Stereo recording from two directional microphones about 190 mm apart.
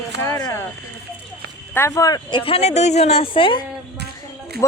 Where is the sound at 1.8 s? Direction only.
15° left (ahead or behind).